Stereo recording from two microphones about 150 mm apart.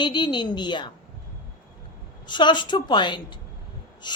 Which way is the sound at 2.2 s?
30° left (ahead or behind).